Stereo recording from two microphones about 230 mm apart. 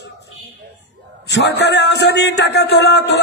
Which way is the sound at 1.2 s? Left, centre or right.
Left.